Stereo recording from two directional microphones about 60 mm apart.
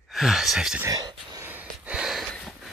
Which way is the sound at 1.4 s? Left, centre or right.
Right.